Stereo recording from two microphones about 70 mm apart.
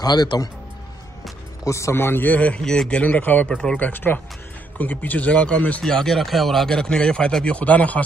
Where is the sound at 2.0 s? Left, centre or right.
Left; by 3.0 s centre.